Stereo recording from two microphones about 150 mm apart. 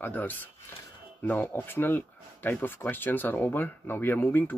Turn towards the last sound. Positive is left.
turn(degrees=15)  # may be behind; listen again after turning